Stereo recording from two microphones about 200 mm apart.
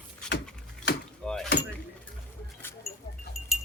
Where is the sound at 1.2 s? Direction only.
Centre (ahead or behind).